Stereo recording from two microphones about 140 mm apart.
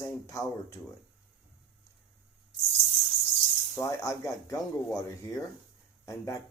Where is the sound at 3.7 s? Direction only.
20° left (ahead or behind).